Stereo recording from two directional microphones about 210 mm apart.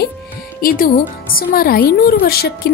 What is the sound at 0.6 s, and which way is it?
Speech, 45° left (ahead or behind).